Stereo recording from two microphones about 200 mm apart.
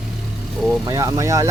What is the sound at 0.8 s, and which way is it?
Speech, 15° right (ahead or behind).